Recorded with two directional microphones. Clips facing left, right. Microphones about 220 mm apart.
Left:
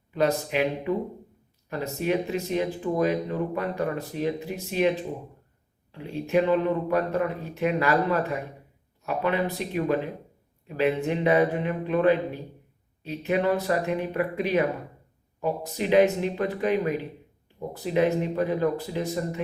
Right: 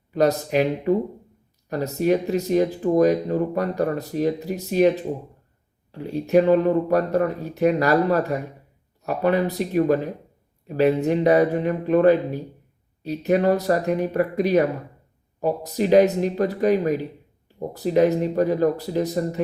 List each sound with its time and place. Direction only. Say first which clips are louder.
0.1 s speech: right 5 dB; 40° right (ahead or behind)
5.9 s speech: right 6 dB; 40° right (ahead or behind)